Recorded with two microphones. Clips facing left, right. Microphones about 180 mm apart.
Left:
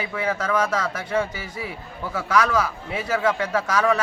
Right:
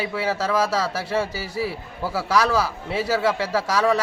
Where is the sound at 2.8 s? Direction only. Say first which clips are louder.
Right 4 dB; 35° right (ahead or behind).